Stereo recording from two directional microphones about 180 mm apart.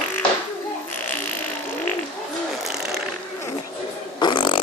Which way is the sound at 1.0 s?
10° left (ahead or behind).